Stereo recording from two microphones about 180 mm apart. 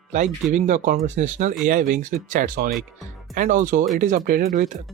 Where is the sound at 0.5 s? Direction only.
45° right (ahead or behind).